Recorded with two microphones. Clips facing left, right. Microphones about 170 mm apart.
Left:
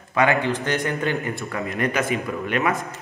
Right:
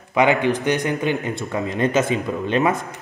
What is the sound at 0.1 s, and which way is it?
A man's voice, 20° right (ahead or behind).